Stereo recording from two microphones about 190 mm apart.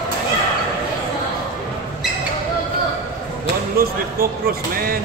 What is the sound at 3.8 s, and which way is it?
Speech, 50° right (ahead or behind).